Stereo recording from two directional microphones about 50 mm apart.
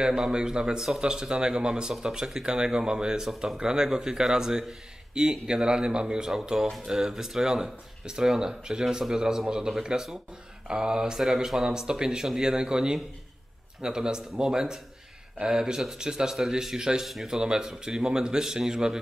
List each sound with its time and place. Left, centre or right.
0.0 s speech: centre